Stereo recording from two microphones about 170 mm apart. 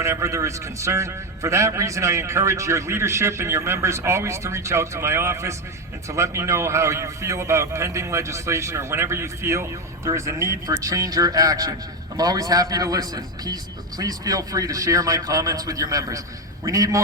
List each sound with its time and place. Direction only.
0.0 s a man's voice: 15° right (ahead or behind)